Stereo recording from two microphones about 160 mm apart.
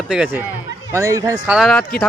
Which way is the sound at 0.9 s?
20° right (ahead or behind).